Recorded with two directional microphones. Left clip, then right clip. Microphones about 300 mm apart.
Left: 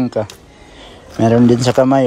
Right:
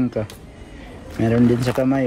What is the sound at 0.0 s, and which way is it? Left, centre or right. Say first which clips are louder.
Speech: left 5 dB; centre.